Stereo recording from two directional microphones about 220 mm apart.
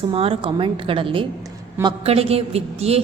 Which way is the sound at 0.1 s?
25° right (ahead or behind).